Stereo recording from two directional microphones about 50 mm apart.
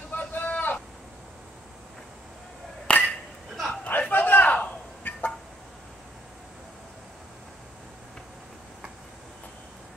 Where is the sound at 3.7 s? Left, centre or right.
Left.